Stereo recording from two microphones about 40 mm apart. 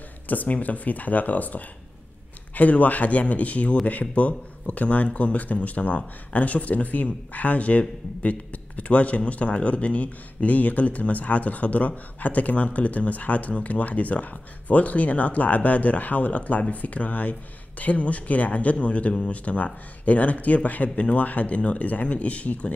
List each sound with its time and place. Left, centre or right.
0.3 s speech: left